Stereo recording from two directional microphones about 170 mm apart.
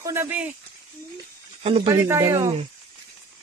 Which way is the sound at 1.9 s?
15° right (ahead or behind).